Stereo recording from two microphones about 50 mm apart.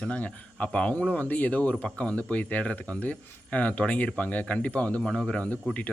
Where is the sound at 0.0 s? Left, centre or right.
Left.